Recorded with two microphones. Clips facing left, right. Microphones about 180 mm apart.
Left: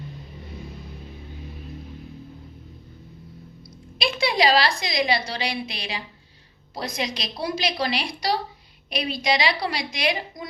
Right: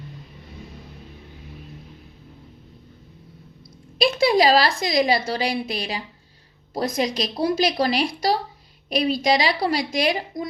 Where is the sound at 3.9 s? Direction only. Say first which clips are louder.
Right 6 dB; 45° right (ahead or behind).